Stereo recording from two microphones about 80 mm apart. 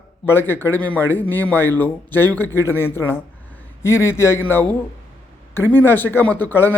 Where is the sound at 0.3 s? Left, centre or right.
Left.